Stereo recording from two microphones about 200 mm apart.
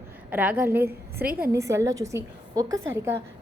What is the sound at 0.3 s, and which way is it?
A woman's voice, 10° right (ahead or behind).